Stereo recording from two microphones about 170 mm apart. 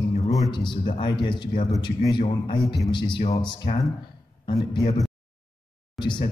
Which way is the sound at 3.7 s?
50° left (ahead or behind).